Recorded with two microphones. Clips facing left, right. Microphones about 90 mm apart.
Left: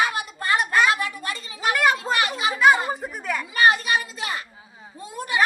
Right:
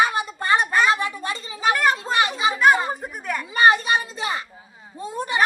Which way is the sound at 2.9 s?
Centre (ahead or behind).